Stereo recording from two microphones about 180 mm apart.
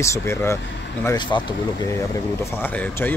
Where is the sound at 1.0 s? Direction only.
25° left (ahead or behind).